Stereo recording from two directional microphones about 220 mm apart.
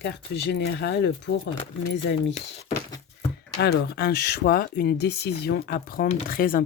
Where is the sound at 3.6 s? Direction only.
50° left (ahead or behind).